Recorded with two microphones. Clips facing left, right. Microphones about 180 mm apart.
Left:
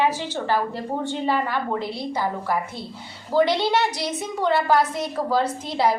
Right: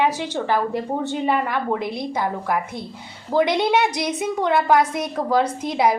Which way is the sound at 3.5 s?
20° right (ahead or behind).